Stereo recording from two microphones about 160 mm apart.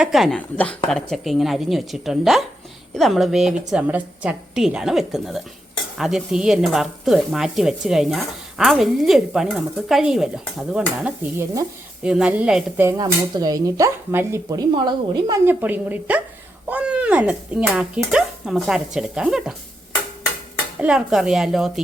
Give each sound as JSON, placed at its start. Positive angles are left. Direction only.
{"t": 0.0, "sound": "speech", "side_deg": 0}
{"t": 12.8, "sound": "speech", "side_deg": -25}
{"t": 14.7, "sound": "speech", "side_deg": -30}
{"t": 15.4, "sound": "speech", "side_deg": -10}
{"t": 20.7, "sound": "speech", "side_deg": -5}